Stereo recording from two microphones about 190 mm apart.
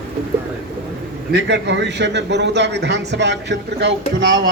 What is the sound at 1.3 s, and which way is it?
Speech, 65° right (ahead or behind).